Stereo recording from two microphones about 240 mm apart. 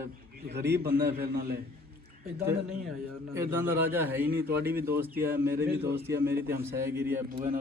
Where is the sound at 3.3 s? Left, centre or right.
Centre.